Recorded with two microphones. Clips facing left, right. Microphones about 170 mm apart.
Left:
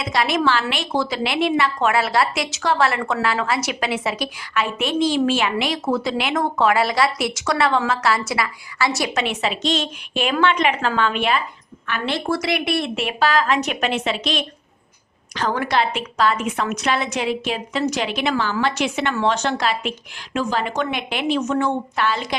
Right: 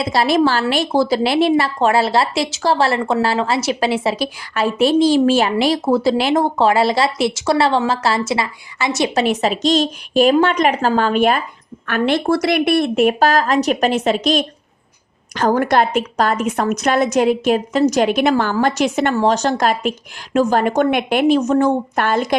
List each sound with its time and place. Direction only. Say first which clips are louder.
0.0 s a woman's voice: right 5 dB; 35° right (ahead or behind)
9.1 s a woman's voice: right 6 dB; 40° right (ahead or behind)